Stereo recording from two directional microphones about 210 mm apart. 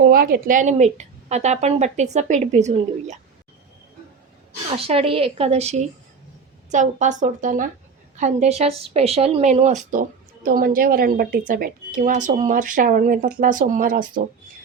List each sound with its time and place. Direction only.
0.0 s a woman's voice: 45° right (ahead or behind)
4.7 s a woman's voice: 25° right (ahead or behind); by 14.3 s 40° right (ahead or behind)